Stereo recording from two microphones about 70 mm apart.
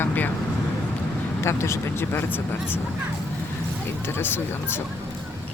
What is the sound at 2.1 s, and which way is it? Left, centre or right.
Speech, left.